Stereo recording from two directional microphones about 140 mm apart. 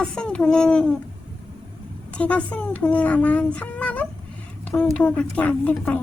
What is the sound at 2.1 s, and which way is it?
A woman's voice, 10° left (ahead or behind).